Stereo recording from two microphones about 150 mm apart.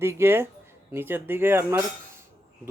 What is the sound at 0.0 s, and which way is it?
A man's voice, 15° right (ahead or behind).